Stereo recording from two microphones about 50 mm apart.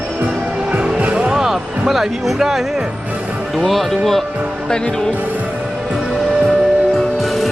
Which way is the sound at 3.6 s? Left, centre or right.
Centre.